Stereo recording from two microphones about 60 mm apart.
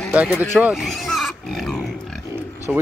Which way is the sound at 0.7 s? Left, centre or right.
Centre.